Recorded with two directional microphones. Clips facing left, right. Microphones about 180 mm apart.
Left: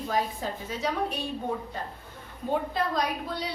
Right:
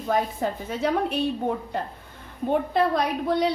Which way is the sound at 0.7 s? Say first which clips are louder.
Right 5 dB; 55° right (ahead or behind).